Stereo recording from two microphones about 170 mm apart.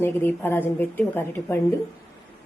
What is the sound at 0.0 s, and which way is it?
A woman's voice, 15° left (ahead or behind).